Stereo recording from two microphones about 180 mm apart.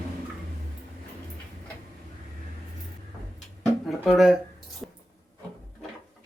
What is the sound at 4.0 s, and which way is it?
Speech, centre (ahead or behind).